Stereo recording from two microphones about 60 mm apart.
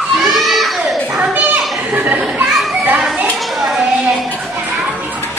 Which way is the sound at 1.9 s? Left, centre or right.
Right.